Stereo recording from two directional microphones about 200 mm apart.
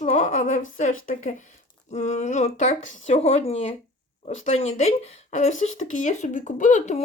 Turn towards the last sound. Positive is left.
turn(degrees=35)  # may be behind; listen again after turning